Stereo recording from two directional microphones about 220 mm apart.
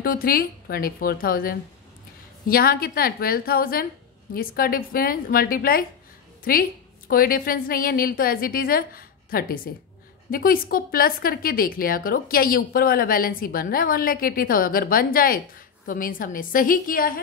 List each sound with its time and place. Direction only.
0.0 s a woman's voice: 40° left (ahead or behind)